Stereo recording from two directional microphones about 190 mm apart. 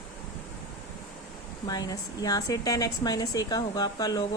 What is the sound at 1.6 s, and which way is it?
Speech, 20° left (ahead or behind).